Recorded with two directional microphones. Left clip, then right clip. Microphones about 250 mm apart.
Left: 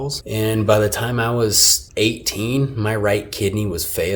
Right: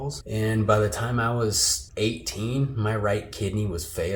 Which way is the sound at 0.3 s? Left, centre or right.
Left.